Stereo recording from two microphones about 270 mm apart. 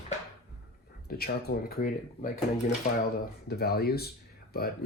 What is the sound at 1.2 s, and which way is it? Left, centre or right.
Speech, left.